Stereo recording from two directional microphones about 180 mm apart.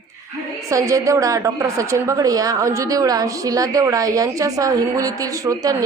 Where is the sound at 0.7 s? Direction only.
20° right (ahead or behind).